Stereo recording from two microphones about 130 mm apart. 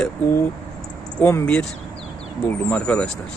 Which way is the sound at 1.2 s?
10° left (ahead or behind).